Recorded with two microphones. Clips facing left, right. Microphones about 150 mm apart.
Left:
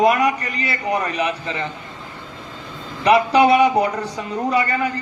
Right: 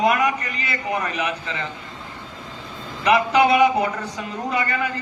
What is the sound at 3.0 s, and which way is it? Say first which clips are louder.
Speech: left 3 dB; 30° left (ahead or behind).